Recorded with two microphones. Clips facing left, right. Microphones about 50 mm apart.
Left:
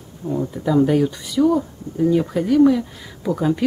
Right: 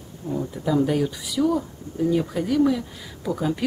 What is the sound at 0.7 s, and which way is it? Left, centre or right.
Speech, centre.